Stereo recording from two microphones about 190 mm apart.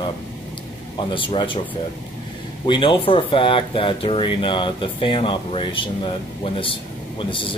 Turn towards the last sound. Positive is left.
turn(degrees=25)  # may be behind; listen again after turning